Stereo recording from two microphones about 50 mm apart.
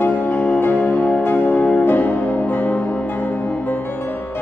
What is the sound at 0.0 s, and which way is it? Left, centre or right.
Music, left.